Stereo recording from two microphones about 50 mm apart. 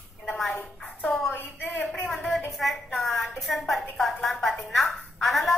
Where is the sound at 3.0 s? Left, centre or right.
Centre.